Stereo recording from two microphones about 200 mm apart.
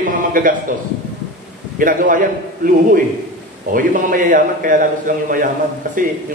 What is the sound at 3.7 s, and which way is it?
A man's voice, 45° right (ahead or behind).